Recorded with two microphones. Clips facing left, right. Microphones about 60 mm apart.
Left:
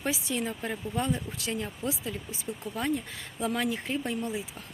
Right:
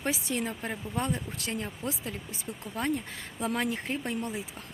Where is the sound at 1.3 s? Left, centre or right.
Right.